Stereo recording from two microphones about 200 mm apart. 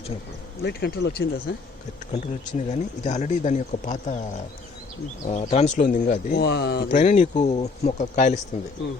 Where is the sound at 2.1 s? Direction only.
35° left (ahead or behind).